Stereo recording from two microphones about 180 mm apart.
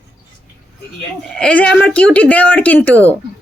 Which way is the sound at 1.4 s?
5° left (ahead or behind).